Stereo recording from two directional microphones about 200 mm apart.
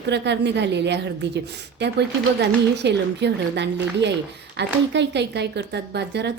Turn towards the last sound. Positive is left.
turn(degrees=-55)  # may be behind; listen again after turning